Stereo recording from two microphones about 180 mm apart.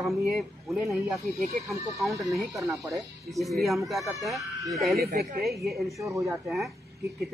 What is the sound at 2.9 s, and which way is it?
Speech, centre (ahead or behind).